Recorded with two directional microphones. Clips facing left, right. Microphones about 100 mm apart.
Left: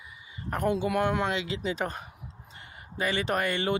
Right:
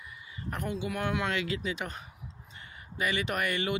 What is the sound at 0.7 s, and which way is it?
Speech, 55° left (ahead or behind).